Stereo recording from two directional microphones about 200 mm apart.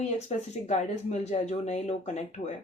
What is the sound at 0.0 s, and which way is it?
Speech, 35° left (ahead or behind).